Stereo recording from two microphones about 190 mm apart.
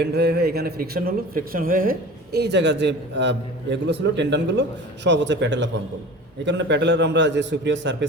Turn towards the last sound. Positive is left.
turn(degrees=-65)  # may be behind; listen again after turning